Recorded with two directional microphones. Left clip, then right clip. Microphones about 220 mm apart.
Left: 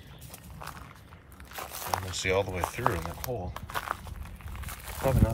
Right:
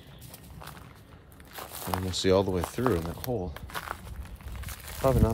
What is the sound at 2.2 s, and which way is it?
Speech, 20° right (ahead or behind).